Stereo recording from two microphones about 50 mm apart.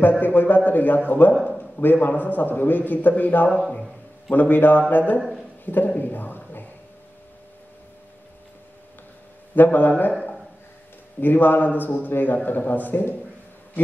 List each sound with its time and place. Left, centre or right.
0.2 s a man's voice: left
1.3 s a man's voice: centre
1.6 s a sound: left
2.0 s a man's voice: left
5.9 s a sound: left
9.6 s a man's voice: left
11.1 s a man's voice: left